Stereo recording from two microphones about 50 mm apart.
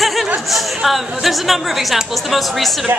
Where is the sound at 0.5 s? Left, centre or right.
Centre.